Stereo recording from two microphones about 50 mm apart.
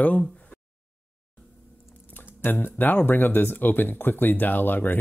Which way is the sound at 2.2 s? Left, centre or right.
Left.